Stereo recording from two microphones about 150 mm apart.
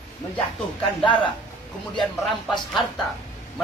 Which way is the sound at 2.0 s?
Centre (ahead or behind).